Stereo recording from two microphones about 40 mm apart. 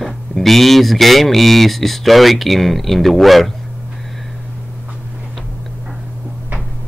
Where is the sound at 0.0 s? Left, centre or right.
Centre.